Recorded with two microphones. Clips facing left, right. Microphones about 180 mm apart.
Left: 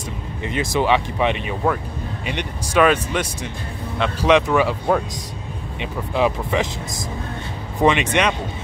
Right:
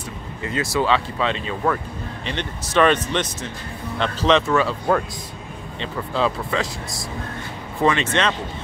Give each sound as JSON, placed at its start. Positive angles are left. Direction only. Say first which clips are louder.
{"t": 0.4, "sound": "speech", "louder": "left 1 dB", "side_deg": 20}
{"t": 7.8, "sound": "speech", "louder": "left 2 dB", "side_deg": 15}